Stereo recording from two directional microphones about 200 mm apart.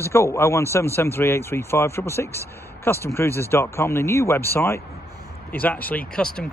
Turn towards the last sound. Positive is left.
turn(degrees=5)  # may be behind; listen again after turning